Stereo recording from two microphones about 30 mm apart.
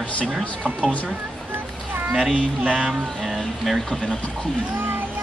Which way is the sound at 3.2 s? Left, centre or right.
Centre.